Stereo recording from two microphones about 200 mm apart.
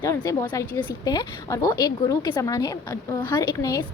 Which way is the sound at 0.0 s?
15° left (ahead or behind).